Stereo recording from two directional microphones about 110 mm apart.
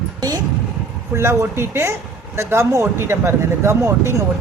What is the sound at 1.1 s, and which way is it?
Speech, 25° right (ahead or behind).